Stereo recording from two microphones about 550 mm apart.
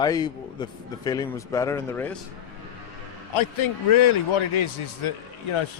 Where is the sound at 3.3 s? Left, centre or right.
Left.